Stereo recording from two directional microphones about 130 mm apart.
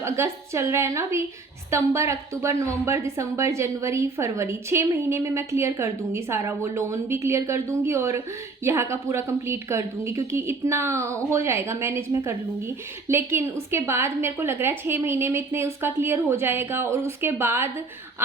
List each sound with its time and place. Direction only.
0.0 s a woman's voice: 20° right (ahead or behind)